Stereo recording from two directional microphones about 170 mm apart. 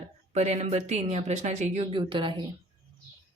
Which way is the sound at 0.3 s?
40° right (ahead or behind).